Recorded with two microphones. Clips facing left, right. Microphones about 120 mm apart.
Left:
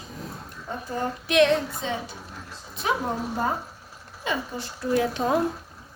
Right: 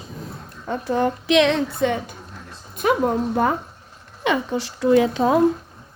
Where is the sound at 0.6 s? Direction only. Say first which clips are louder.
Right 8 dB; 80° right; by 3.5 s 60° right (ahead or behind).